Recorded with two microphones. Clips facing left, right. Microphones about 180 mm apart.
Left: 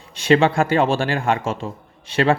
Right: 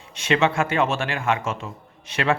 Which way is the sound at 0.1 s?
35° left (ahead or behind).